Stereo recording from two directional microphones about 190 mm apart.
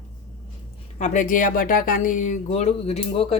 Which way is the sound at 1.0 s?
40° left (ahead or behind).